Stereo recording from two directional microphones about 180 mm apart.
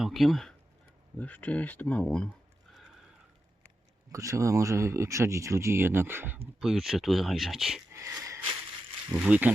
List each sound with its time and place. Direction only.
0.0 s speech: centre (ahead or behind)
4.1 s speech: 15° right (ahead or behind); by 7.8 s centre (ahead or behind)
7.9 s wheeze: 20° right (ahead or behind)
9.2 s speech: 5° right (ahead or behind)